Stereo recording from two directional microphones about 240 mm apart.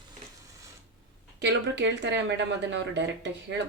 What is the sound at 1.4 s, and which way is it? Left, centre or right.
Speech, right.